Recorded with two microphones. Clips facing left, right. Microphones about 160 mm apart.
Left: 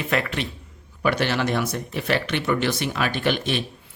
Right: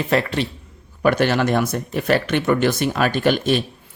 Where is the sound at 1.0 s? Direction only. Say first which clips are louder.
Right 5 dB; 45° right (ahead or behind).